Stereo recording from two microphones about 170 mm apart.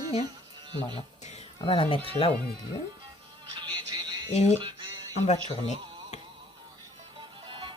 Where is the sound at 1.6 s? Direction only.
30° left (ahead or behind).